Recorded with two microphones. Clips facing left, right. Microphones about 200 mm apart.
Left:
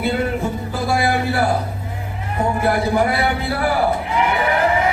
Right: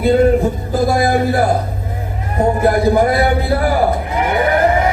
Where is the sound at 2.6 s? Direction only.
45° right (ahead or behind).